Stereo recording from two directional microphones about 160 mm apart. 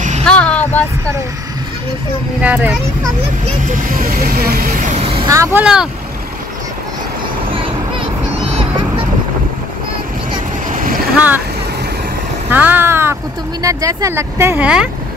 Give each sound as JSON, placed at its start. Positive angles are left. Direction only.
{"t": 0.2, "sound": "music", "side_deg": 5}
{"t": 2.4, "sound": "speech", "side_deg": -10}
{"t": 3.6, "sound": "speech", "side_deg": -60}
{"t": 5.3, "sound": "speech", "side_deg": -15}
{"t": 7.5, "sound": "a sound", "side_deg": -35}
{"t": 10.7, "sound": "boat", "side_deg": -55}
{"t": 11.1, "sound": "speech", "side_deg": -10}
{"t": 12.4, "sound": "speech", "side_deg": -10}